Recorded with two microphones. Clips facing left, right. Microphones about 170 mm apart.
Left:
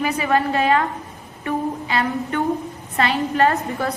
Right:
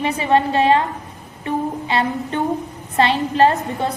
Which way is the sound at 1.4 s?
25° right (ahead or behind).